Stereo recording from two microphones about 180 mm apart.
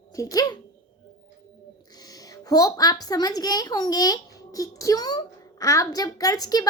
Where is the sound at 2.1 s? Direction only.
20° left (ahead or behind).